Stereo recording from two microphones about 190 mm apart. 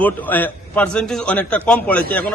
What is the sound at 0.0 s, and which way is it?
A man's voice, 10° left (ahead or behind).